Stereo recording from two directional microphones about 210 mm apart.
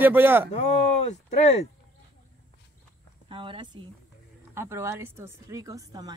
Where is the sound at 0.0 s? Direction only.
10° right (ahead or behind).